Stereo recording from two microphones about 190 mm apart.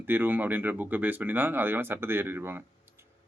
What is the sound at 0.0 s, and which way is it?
Speech, 10° right (ahead or behind).